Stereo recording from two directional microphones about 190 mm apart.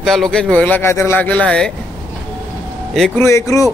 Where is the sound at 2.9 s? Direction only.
Centre (ahead or behind).